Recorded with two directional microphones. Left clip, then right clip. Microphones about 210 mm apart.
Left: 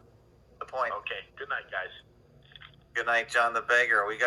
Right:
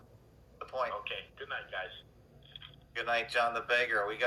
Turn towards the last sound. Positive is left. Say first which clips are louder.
# left 6 dB
turn(degrees=25)  # may be behind; listen again after turning